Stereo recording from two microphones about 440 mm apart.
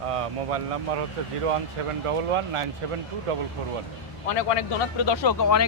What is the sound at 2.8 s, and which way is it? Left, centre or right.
Speech, right.